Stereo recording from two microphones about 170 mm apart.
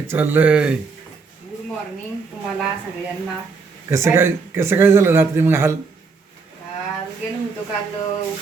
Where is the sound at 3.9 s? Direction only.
15° right (ahead or behind).